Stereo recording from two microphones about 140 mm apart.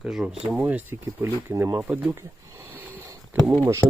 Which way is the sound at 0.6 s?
15° right (ahead or behind).